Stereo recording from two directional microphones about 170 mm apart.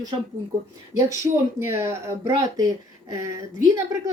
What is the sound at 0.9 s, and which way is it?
Speech, 15° right (ahead or behind).